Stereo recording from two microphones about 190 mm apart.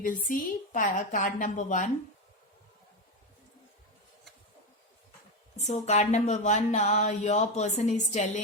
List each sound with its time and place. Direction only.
0.3 s a woman's voice: 45° left (ahead or behind)
5.5 s speech: 35° left (ahead or behind)